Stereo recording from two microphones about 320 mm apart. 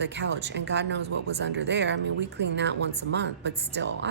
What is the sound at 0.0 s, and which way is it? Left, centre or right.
Speech, right.